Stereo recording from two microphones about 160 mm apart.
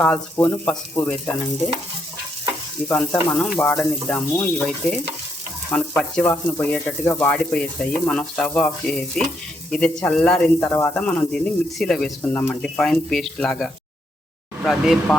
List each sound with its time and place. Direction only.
0.0 s speech: 10° left (ahead or behind)
2.9 s speech: 10° left (ahead or behind)
10.7 s speech: 15° left (ahead or behind); by 15.1 s centre (ahead or behind)